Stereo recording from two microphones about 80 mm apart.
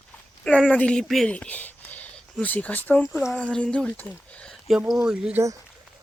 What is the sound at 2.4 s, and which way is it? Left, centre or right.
Speech, left.